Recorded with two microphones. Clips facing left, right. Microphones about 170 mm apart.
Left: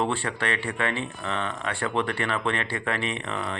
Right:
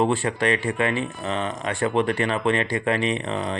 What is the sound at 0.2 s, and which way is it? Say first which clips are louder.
Speech: right 6 dB; 15° right (ahead or behind).